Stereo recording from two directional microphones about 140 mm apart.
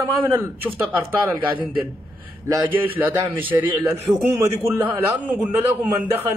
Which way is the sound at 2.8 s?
15° right (ahead or behind).